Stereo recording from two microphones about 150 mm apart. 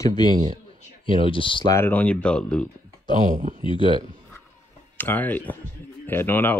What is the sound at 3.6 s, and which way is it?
Speech, 35° left (ahead or behind).